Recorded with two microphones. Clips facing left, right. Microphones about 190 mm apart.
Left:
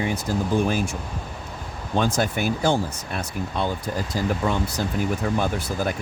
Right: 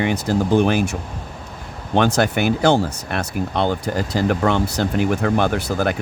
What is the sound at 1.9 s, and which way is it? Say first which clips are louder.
Speech: right 5 dB; 75° right (ahead or behind).